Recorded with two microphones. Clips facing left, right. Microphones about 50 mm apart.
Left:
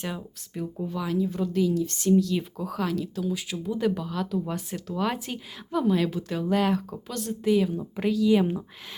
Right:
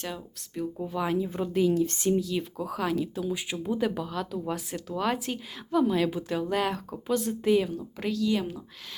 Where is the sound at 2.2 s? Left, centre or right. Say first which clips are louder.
Left 2 dB; centre.